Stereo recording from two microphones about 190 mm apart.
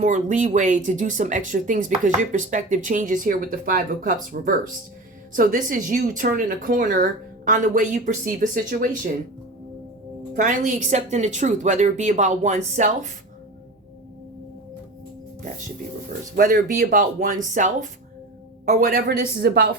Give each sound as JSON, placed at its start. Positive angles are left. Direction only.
{"t": 0.0, "sound": "speech", "side_deg": -40}
{"t": 10.3, "sound": "a woman's voice", "side_deg": -40}
{"t": 16.3, "sound": "speech", "side_deg": -45}